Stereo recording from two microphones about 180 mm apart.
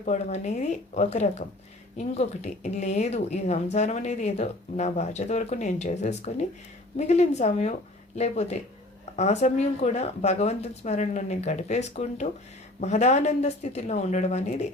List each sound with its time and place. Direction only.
0.0 s speech: 40° left (ahead or behind)